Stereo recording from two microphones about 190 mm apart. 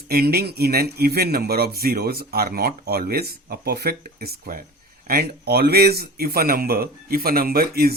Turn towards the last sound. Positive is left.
turn(degrees=-55)  # may be behind; listen again after turning